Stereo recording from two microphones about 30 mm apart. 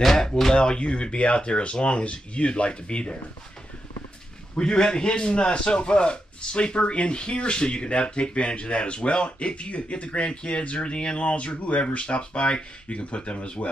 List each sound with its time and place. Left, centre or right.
0.5 s a man's voice: left
4.6 s a man's voice: left